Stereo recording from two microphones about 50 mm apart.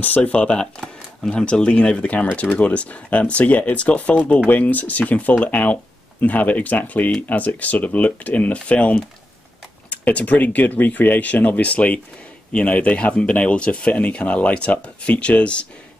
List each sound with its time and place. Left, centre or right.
0.0 s speech: left
0.3 s speech: centre